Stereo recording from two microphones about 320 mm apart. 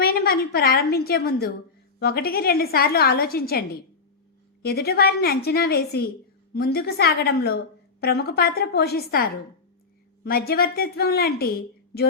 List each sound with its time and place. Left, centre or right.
0.0 s a woman's voice: left
4.6 s a woman's voice: left